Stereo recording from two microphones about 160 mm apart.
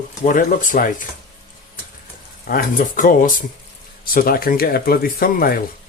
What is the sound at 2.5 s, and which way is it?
Speech, 60° left (ahead or behind).